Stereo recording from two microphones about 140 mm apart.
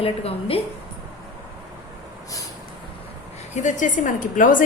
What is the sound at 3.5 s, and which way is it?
A woman's voice, 60° left (ahead or behind).